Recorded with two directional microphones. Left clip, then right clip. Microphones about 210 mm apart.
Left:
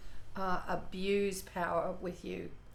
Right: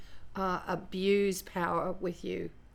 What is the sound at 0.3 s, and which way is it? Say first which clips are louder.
Speech: right 3 dB; 50° right (ahead or behind).